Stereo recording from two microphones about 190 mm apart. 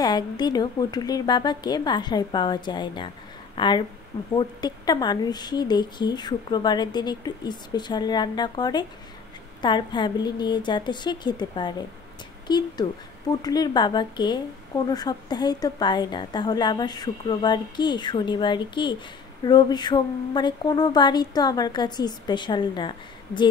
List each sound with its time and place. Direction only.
0.0 s a woman's voice: 20° left (ahead or behind)